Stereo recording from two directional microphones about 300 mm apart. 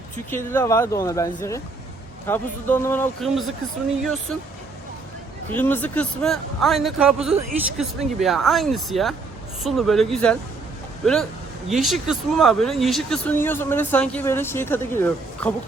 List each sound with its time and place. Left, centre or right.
0.3 s a man's voice: centre
5.5 s speech: centre
7.3 s speech: right
7.8 s speech: centre